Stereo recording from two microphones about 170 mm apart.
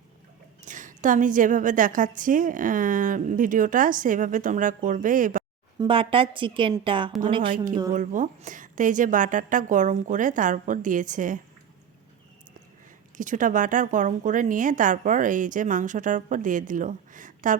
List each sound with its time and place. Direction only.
0.6 s a woman's voice: 50° right (ahead or behind)
5.8 s a woman's voice: 30° right (ahead or behind)
7.5 s a woman's voice: 50° right (ahead or behind)
13.1 s a woman's voice: 50° right (ahead or behind)